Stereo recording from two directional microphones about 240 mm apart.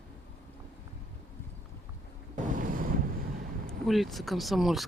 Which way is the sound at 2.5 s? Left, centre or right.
Right.